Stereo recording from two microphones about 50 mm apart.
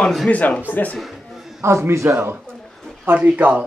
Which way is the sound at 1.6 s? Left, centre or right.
Right.